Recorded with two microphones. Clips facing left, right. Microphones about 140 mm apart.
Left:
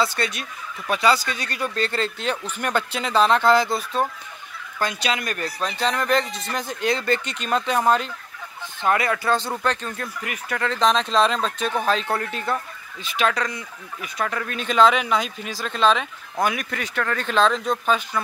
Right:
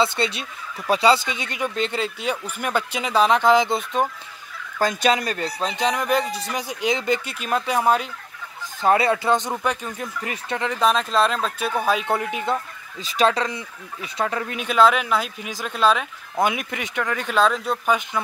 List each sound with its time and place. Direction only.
0.0 s speech: 25° right (ahead or behind)
4.7 s speech: 40° right (ahead or behind); by 8.1 s 10° right (ahead or behind)
8.8 s speech: 30° right (ahead or behind); by 10.1 s 15° right (ahead or behind)
10.2 s speech: 25° right (ahead or behind)
10.7 s speech: 5° right (ahead or behind)
13.0 s speech: 30° right (ahead or behind)
14.7 s speech: 5° right (ahead or behind)
16.3 s speech: 20° right (ahead or behind)